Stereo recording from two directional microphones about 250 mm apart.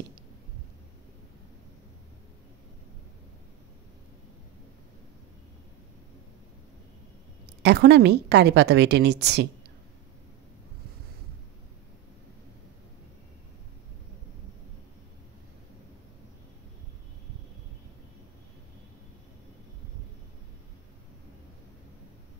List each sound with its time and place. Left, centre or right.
7.6 s a woman's voice: right